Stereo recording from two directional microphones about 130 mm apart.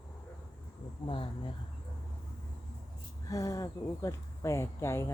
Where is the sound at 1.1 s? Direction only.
40° left (ahead or behind).